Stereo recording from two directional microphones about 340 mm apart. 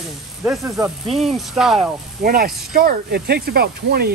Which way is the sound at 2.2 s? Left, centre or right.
Right.